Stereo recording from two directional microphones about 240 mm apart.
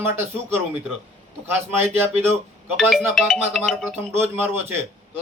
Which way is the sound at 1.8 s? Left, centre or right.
Centre.